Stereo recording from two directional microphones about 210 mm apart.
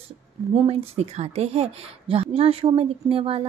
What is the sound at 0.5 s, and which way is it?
Speech, 30° right (ahead or behind).